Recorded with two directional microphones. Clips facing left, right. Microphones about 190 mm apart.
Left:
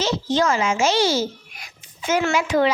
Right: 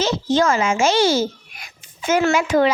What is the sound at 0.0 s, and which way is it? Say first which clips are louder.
Speech: right 3 dB; 50° right (ahead or behind).